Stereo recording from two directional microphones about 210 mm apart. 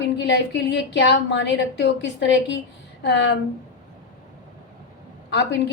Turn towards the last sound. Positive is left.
turn(degrees=55)  # may be behind; listen again after turning